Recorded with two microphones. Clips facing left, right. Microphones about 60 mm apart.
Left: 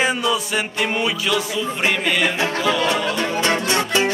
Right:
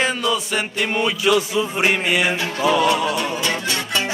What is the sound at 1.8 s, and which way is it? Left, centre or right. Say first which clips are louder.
Music: even; centre.